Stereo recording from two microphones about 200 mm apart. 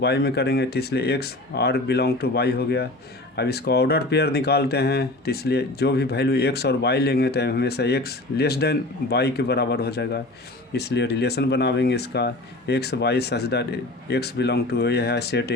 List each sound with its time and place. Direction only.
0.0 s speech: 55° left (ahead or behind)